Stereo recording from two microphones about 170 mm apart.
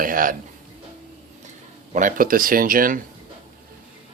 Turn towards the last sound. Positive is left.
turn(degrees=-55)  # may be behind; listen again after turning